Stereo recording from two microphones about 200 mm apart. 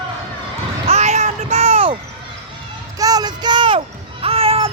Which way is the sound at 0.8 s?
35° right (ahead or behind).